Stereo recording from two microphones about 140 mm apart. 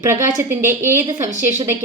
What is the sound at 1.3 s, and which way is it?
Speech, 60° right (ahead or behind).